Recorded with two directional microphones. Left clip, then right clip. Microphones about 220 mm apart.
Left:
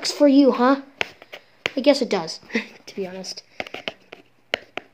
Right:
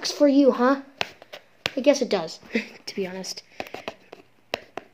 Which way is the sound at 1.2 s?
15° left (ahead or behind).